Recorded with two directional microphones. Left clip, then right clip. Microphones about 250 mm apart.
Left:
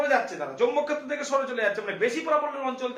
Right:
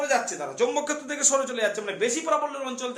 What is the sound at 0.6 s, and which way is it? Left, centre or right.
A man's voice, right.